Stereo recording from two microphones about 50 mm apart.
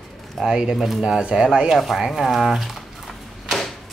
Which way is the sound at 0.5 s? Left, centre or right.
Centre.